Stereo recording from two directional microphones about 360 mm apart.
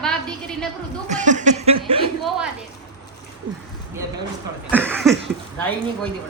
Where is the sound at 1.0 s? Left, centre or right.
Centre.